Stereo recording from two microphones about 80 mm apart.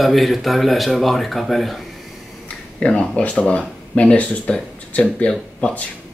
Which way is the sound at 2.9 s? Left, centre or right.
Centre.